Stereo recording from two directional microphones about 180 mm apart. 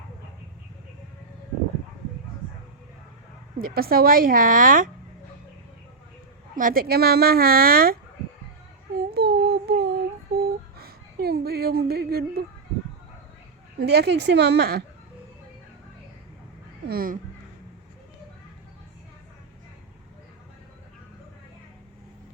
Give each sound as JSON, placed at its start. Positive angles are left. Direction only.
{"t": 3.6, "sound": "a woman's voice", "side_deg": -55}
{"t": 6.6, "sound": "a woman's voice", "side_deg": -50}
{"t": 9.0, "sound": "a sound", "side_deg": -60}
{"t": 13.7, "sound": "a woman's voice", "side_deg": -65}
{"t": 16.8, "sound": "speech", "side_deg": -55}